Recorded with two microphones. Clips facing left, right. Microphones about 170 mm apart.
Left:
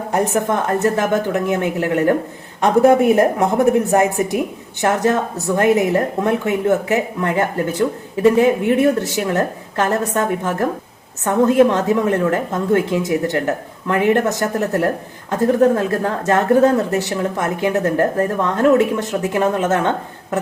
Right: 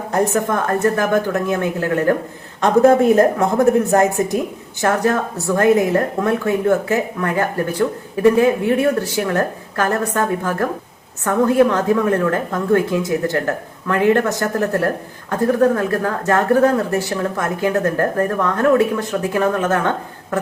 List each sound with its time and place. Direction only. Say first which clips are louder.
0.1 s a woman's voice: even; 20° left (ahead or behind)
4.8 s speech: left 1 dB; 20° left (ahead or behind)